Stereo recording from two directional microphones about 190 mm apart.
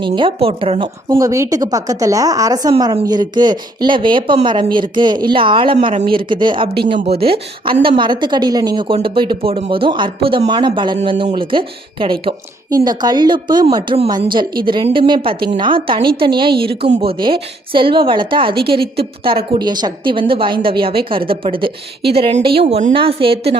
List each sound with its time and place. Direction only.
0.0 s a woman's voice: 25° right (ahead or behind)
1.1 s a woman's voice: 15° right (ahead or behind)